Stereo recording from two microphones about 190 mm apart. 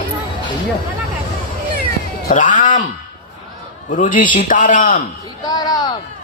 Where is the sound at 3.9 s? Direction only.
45° left (ahead or behind).